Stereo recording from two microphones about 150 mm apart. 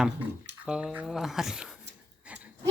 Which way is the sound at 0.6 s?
5° right (ahead or behind).